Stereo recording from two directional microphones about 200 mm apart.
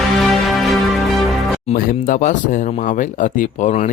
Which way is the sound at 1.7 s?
45° left (ahead or behind).